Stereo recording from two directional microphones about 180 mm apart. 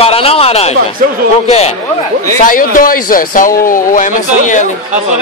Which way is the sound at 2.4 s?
50° left (ahead or behind).